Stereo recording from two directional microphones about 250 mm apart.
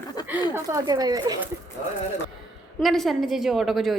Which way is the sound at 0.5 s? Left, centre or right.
Centre.